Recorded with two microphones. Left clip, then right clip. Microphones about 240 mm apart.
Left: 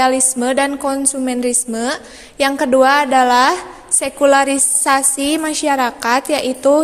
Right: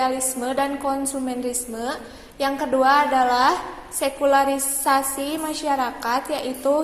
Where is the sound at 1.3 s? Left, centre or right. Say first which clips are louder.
Left 8 dB; left.